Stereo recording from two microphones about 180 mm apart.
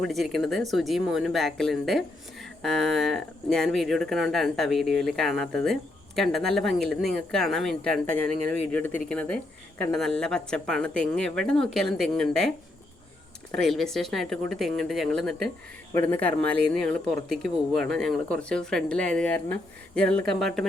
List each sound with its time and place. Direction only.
0.0 s speech: centre (ahead or behind)
13.7 s speech: centre (ahead or behind)